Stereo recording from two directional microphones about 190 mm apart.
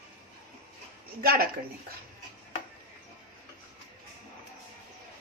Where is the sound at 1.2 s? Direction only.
55° right (ahead or behind).